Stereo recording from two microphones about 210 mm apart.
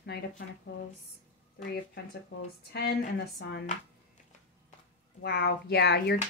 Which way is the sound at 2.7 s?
45° left (ahead or behind).